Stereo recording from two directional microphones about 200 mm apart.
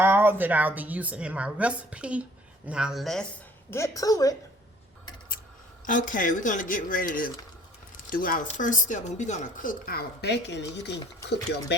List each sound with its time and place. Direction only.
0.0 s a woman's voice: 10° right (ahead or behind)
3.7 s a woman's voice: 15° left (ahead or behind)
5.8 s speech: 40° left (ahead or behind); by 11.8 s 55° left (ahead or behind)